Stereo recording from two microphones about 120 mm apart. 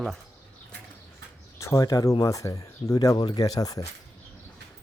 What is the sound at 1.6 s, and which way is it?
A man's voice, 30° left (ahead or behind).